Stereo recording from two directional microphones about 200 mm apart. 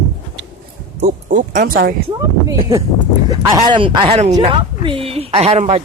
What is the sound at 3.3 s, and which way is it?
Speech, 20° right (ahead or behind).